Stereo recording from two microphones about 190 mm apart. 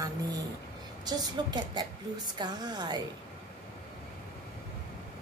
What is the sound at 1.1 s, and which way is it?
A woman's voice, 20° right (ahead or behind).